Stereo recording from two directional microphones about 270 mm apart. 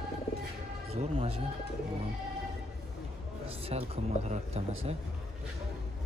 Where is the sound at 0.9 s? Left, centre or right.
Right.